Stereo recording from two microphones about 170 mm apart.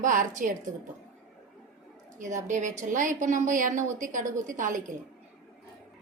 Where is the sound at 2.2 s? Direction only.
45° right (ahead or behind).